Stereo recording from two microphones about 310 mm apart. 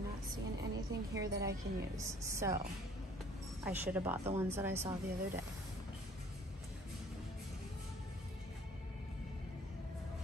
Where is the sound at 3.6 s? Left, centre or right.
Centre.